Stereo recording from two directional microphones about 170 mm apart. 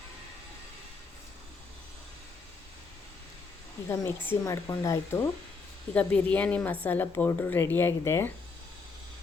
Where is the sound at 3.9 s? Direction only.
15° left (ahead or behind).